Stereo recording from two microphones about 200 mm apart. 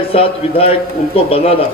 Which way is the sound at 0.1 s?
30° left (ahead or behind).